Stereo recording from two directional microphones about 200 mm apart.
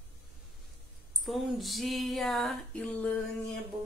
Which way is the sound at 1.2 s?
Centre (ahead or behind).